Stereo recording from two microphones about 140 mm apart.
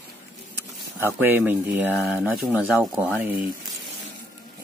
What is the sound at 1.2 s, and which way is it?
Speech, 15° right (ahead or behind).